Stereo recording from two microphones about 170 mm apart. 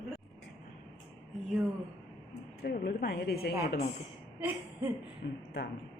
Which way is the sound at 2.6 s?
65° left (ahead or behind).